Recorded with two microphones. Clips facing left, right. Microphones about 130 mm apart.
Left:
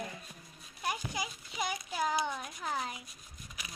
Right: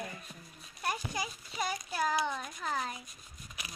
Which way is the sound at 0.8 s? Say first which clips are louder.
Right 1 dB; 10° left (ahead or behind).